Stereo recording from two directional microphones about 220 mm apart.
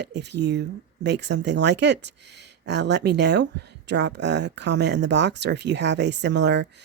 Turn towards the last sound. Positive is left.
turn(degrees=-50)  # may be behind; listen again after turning